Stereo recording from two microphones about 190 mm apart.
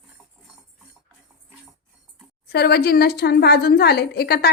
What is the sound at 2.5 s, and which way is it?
A woman's voice, 60° left (ahead or behind).